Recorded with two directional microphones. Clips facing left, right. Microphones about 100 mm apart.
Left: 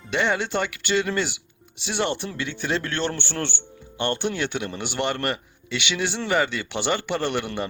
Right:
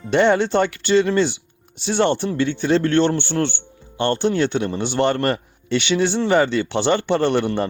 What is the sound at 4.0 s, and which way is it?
A man's voice, 30° right (ahead or behind).